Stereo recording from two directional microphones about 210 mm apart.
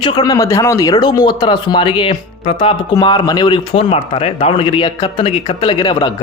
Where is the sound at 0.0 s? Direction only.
15° left (ahead or behind).